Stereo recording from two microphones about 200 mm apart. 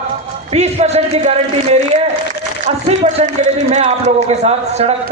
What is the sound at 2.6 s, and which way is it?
A man's voice, 30° right (ahead or behind).